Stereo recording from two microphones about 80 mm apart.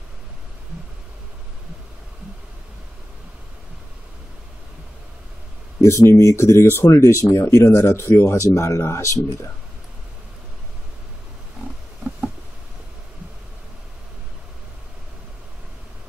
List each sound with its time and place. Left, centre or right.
5.8 s speech: left